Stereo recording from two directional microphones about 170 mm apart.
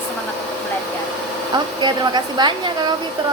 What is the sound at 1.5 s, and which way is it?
Speech, 25° right (ahead or behind).